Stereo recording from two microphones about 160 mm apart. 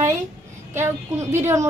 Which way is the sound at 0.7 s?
15° right (ahead or behind).